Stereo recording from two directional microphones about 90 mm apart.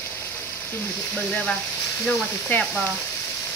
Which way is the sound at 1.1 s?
10° left (ahead or behind).